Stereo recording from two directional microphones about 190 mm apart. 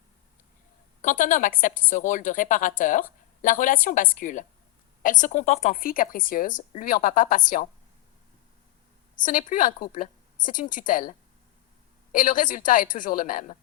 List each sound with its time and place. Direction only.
1.0 s speech: 45° left (ahead or behind)
9.2 s speech: 45° left (ahead or behind)
12.1 s speech: 45° left (ahead or behind)